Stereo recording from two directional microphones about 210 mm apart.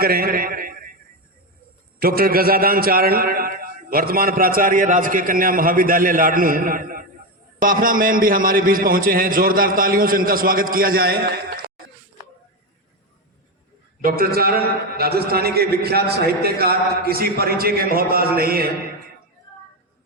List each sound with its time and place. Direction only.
0.0 s a sound: 45° right (ahead or behind)
2.0 s a man's voice: 45° right (ahead or behind)
14.0 s a man's voice: 45° right (ahead or behind)